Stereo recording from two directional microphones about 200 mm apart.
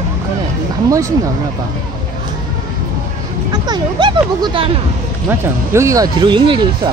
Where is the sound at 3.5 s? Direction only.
20° right (ahead or behind).